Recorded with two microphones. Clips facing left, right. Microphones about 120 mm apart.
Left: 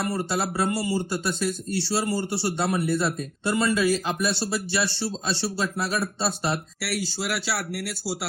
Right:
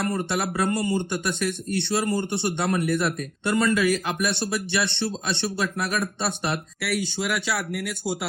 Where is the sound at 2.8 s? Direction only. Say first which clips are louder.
Right 1 dB; 30° left (ahead or behind).